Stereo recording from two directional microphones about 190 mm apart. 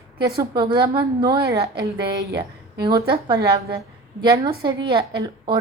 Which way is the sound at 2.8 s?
25° right (ahead or behind).